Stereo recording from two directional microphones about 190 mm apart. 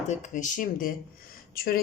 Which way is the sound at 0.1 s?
40° left (ahead or behind).